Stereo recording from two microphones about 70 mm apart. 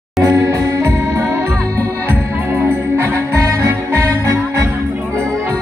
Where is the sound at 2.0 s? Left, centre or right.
Right.